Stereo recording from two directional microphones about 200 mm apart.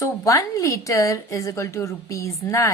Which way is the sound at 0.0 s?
15° left (ahead or behind).